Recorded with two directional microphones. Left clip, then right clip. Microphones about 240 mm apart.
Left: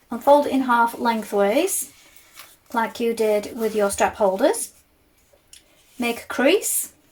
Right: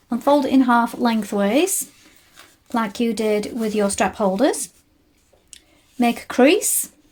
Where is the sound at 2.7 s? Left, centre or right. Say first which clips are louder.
Even; right.